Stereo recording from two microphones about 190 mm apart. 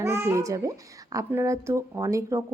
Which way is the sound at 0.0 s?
15° right (ahead or behind).